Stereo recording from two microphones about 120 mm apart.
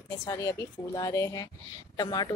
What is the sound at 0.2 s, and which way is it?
A woman's voice, 25° left (ahead or behind).